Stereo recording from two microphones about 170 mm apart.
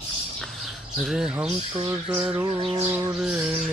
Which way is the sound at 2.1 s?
10° right (ahead or behind).